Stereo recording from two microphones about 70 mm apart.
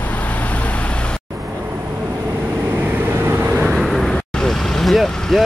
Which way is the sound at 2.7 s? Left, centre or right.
Right.